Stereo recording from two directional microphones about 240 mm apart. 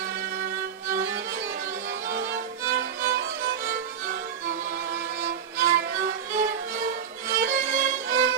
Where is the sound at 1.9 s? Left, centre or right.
Right.